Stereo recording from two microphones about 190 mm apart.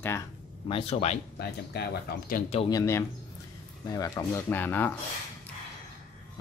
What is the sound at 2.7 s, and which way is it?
Speech, 15° left (ahead or behind).